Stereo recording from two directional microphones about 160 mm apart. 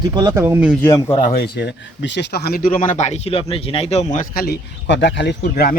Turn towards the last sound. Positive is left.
turn(degrees=85)